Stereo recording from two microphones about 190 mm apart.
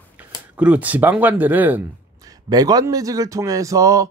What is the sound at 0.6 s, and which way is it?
Speech, 5° right (ahead or behind).